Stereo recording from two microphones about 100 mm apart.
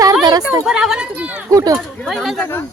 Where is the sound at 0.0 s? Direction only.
40° right (ahead or behind).